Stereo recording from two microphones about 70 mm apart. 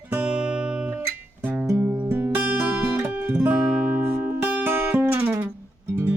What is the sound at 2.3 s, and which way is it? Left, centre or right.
Music, centre.